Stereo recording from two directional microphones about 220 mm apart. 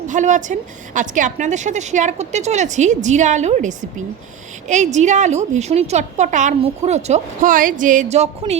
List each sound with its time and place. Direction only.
0.1 s a woman's voice: 35° right (ahead or behind)